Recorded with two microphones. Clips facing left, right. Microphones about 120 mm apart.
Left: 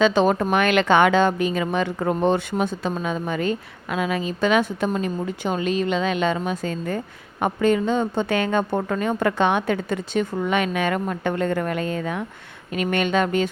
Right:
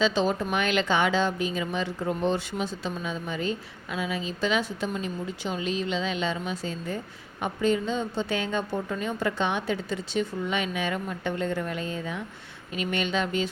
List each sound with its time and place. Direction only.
0.0 s a woman's voice: 55° left (ahead or behind)